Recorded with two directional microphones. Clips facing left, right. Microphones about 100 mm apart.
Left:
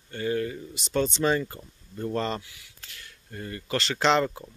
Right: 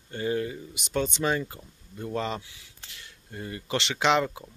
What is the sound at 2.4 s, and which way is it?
Speech, 25° right (ahead or behind).